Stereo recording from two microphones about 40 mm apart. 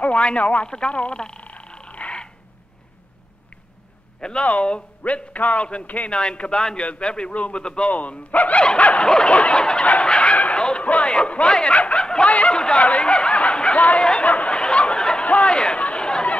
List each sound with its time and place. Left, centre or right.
0.0 s a man's voice: left
0.7 s speech: left
1.4 s frog: left
4.2 s speech: left
4.5 s a man's voice: left
7.9 s a man's voice: left
8.5 s dog: left
9.0 s speech: left
10.0 s fowl: left
10.8 s speech: left
12.3 s a man's voice: left
14.2 s chatter: left
14.6 s a sound: left
15.2 s a sound: left